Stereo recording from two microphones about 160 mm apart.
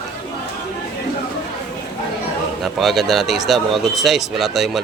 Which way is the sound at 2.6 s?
Centre (ahead or behind).